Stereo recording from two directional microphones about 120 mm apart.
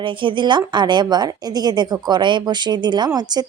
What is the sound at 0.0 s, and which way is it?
Speech, 45° right (ahead or behind).